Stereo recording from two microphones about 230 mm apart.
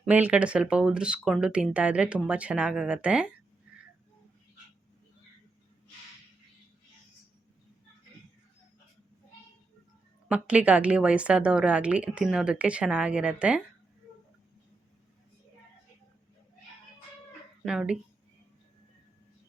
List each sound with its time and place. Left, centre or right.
0.0 s speech: centre
10.2 s speech: centre
17.7 s speech: centre